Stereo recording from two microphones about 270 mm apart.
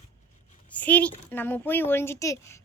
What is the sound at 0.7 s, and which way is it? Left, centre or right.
A woman's voice, centre.